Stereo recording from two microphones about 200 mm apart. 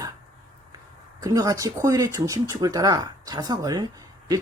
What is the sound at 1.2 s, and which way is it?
Speech, 20° right (ahead or behind).